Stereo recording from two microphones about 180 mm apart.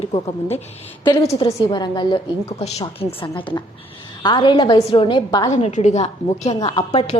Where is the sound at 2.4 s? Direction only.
35° left (ahead or behind).